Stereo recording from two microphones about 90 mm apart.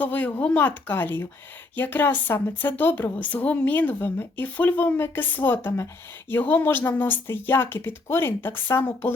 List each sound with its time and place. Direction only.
0.0 s speech: 20° left (ahead or behind)